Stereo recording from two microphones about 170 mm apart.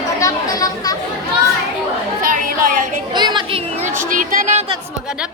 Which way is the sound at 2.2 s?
55° right (ahead or behind).